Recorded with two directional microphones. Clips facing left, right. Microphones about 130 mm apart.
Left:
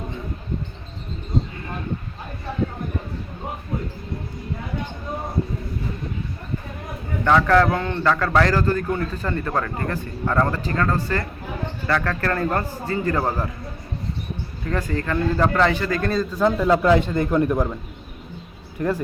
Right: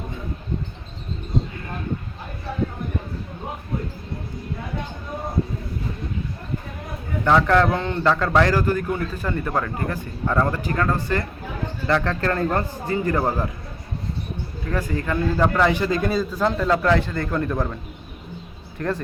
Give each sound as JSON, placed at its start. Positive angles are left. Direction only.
{"t": 7.3, "sound": "a man's voice", "side_deg": -10}
{"t": 14.7, "sound": "a man's voice", "side_deg": -10}
{"t": 16.4, "sound": "a man's voice", "side_deg": 10}
{"t": 18.8, "sound": "a man's voice", "side_deg": 10}